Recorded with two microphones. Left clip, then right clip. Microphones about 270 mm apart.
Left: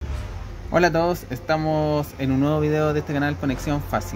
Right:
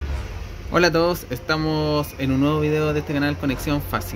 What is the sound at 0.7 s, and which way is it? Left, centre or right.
Speech, left.